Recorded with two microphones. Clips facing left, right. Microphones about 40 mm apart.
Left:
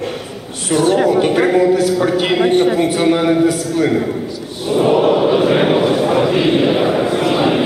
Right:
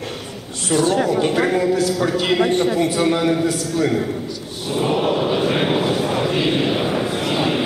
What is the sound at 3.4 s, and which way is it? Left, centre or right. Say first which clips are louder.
Speech: left 5 dB; left.